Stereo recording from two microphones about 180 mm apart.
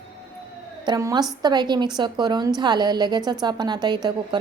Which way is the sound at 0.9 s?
20° right (ahead or behind).